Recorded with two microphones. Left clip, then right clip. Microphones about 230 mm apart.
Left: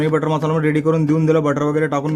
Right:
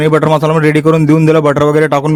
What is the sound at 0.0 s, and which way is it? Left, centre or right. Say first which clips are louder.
Speech: right 9 dB; right.